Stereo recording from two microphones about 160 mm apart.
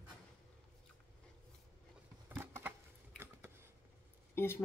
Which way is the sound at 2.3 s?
15° right (ahead or behind).